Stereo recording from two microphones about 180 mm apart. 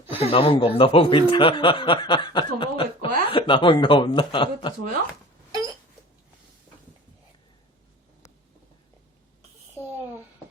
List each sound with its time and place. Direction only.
0.1 s speech: 30° left (ahead or behind)